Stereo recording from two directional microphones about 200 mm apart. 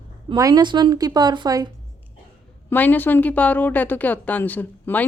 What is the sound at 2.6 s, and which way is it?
A woman's voice, 10° left (ahead or behind).